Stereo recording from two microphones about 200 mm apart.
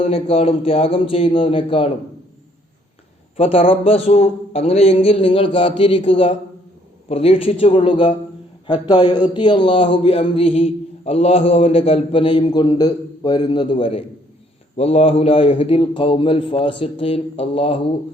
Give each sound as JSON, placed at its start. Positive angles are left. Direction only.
{"t": 0.0, "sound": "speech", "side_deg": 30}
{"t": 3.3, "sound": "speech", "side_deg": 30}